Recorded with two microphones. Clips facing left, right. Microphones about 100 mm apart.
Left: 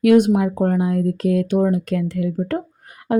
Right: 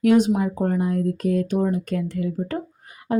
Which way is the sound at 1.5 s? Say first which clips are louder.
Left 4 dB; 70° left (ahead or behind).